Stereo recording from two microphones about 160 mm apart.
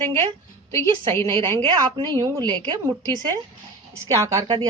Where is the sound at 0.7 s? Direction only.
15° left (ahead or behind).